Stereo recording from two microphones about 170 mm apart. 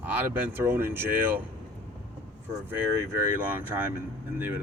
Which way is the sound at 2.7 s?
10° right (ahead or behind).